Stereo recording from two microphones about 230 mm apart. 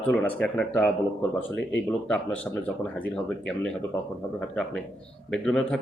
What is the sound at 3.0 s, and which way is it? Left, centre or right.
Speech, centre.